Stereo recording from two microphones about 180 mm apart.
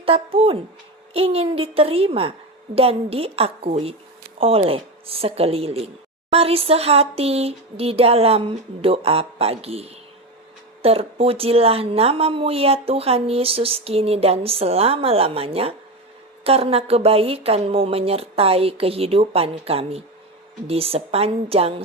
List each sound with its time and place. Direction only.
0.0 s speech: 30° right (ahead or behind)